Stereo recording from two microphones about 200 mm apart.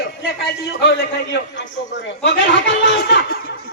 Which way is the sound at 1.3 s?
60° left (ahead or behind).